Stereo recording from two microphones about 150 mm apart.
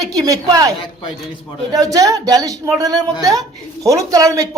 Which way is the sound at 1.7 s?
25° right (ahead or behind).